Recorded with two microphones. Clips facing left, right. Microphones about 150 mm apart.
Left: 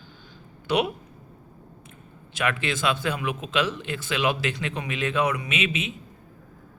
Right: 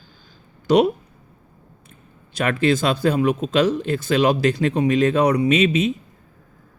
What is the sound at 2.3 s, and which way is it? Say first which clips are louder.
Speech: right 8 dB; 40° right (ahead or behind).